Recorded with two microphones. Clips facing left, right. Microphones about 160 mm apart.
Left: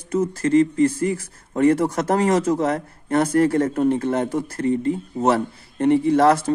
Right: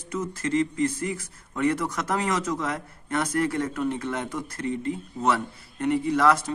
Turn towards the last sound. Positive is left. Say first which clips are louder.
# left 6 dB
turn(degrees=30)  # may be behind; listen again after turning